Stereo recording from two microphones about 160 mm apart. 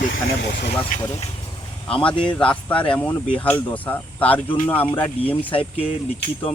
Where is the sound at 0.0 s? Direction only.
85° left.